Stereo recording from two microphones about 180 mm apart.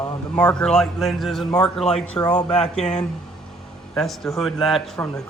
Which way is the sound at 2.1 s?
25° left (ahead or behind).